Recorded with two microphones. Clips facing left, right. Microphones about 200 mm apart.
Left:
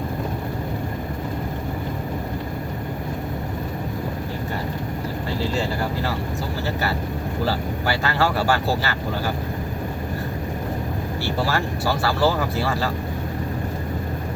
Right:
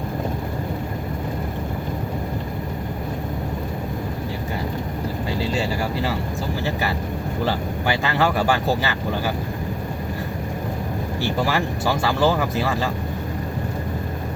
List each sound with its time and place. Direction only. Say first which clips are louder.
7.9 s speech: right 1 dB; 15° right (ahead or behind)
11.2 s speech: right 2 dB; 15° right (ahead or behind)